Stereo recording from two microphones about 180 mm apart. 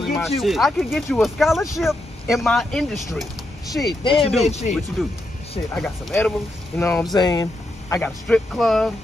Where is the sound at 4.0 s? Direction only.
30° left (ahead or behind).